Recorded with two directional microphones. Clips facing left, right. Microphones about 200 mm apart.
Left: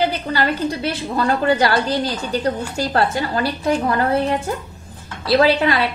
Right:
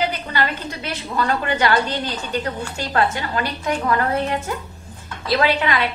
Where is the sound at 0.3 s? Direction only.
35° left (ahead or behind).